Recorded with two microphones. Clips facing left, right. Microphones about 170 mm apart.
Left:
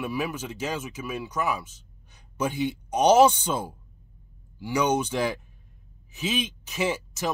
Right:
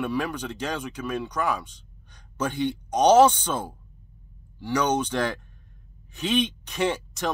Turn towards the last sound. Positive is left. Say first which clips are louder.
# right 1 dB
turn(degrees=5)  # may be behind; listen again after turning